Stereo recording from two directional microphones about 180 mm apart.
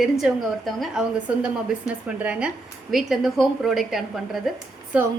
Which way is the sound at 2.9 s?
Centre (ahead or behind).